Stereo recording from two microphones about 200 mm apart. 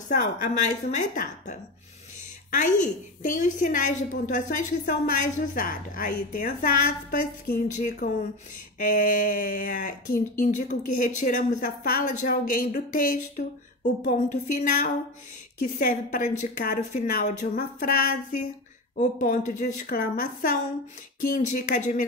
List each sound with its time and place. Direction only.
0.1 s a woman's voice: 40° left (ahead or behind)